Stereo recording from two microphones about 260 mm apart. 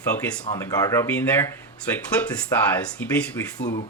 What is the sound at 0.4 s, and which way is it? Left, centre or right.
Speech, centre.